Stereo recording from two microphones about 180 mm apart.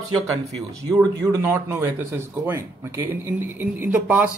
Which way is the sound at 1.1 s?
15° right (ahead or behind).